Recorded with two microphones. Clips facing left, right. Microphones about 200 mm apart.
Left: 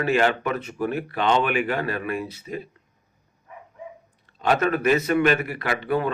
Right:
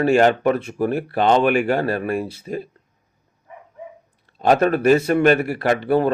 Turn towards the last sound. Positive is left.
turn(degrees=-35)  # may be behind; listen again after turning